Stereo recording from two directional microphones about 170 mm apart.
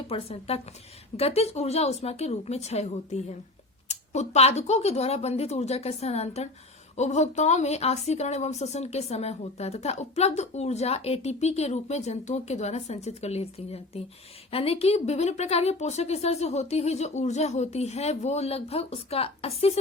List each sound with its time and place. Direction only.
0.1 s a woman's voice: 35° left (ahead or behind)